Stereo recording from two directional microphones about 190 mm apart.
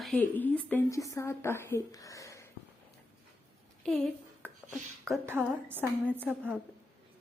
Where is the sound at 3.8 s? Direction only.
5° left (ahead or behind).